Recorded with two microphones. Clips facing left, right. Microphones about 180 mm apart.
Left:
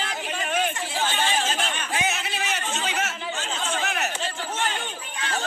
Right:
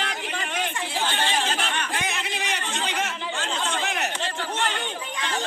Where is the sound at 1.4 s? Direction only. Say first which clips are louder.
Right 1 dB; 60° right (ahead or behind).